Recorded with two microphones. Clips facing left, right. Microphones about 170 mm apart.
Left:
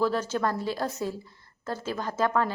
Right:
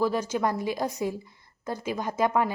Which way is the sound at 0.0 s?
10° right (ahead or behind).